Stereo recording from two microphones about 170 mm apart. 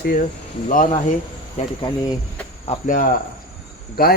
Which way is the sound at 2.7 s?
40° left (ahead or behind).